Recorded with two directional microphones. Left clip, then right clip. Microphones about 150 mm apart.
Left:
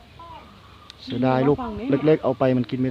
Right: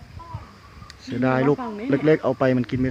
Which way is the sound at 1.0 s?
10° left (ahead or behind).